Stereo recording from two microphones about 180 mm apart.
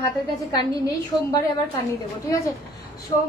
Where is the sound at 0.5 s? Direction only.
20° left (ahead or behind).